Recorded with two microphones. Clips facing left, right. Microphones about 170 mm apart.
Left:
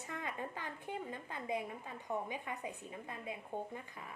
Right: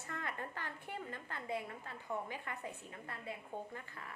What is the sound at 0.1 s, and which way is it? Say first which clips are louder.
A woman's voice: left 1 dB; 15° left (ahead or behind).